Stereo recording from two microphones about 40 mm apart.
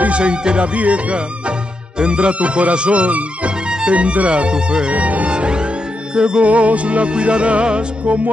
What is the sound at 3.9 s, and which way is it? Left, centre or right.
Music, right.